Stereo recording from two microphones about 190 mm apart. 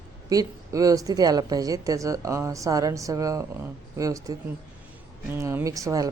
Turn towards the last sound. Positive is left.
turn(degrees=-15)  # may be behind; listen again after turning